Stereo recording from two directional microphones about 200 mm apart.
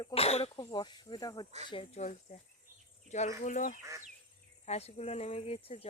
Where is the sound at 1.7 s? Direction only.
30° left (ahead or behind).